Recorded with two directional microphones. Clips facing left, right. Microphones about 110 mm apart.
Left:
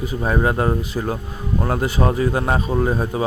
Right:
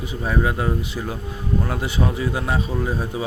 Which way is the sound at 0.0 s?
45° left (ahead or behind).